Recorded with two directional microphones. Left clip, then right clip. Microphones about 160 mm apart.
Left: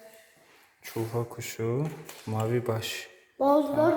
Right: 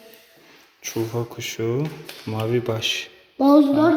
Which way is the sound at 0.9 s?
Centre (ahead or behind).